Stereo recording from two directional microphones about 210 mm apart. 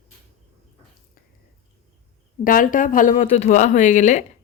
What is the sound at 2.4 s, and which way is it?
Speech, 40° left (ahead or behind).